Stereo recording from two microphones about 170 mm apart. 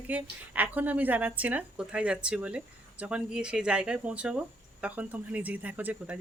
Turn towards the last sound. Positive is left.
turn(degrees=-10)  # may be behind; listen again after turning